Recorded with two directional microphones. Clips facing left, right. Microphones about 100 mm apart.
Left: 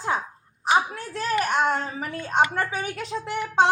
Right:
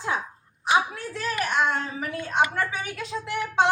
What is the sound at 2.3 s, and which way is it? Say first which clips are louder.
Speech: left 2 dB; 35° left (ahead or behind).